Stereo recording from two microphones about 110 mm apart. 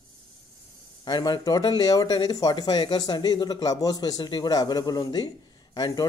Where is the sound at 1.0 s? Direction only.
40° left (ahead or behind).